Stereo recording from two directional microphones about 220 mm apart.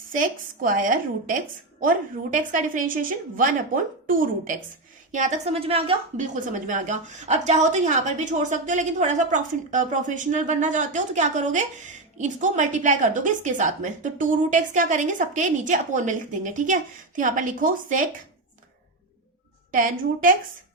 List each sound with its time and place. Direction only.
0.1 s a woman's voice: 35° right (ahead or behind)
19.7 s a woman's voice: 40° right (ahead or behind)